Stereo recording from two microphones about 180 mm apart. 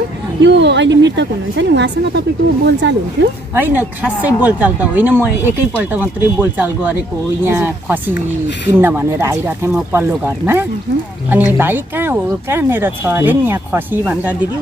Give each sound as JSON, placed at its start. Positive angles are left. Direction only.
{"t": 0.4, "sound": "speech", "side_deg": -75}
{"t": 3.5, "sound": "speech", "side_deg": -10}